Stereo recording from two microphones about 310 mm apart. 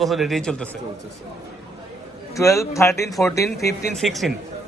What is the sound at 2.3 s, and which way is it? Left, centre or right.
A man's voice, centre.